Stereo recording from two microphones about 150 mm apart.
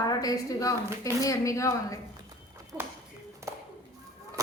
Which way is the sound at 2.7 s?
15° right (ahead or behind).